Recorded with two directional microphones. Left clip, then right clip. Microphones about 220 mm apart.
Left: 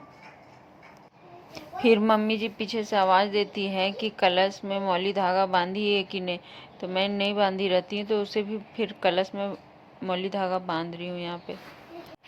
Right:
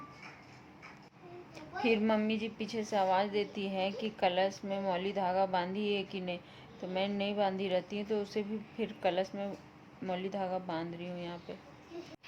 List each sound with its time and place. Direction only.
1.8 s a woman's voice: 20° left (ahead or behind)